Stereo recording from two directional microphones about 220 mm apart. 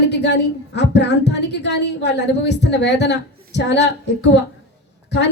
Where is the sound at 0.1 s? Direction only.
50° left (ahead or behind).